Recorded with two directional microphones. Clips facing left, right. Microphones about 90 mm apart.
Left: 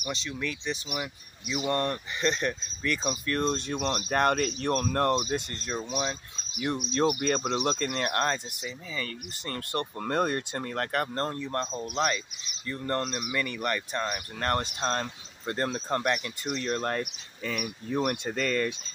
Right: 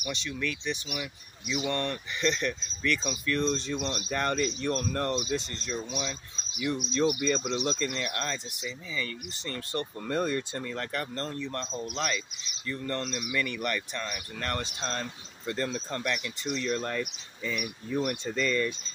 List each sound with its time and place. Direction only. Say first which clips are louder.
0.0 s speech: even; 35° left (ahead or behind); by 18.8 s 60° left (ahead or behind)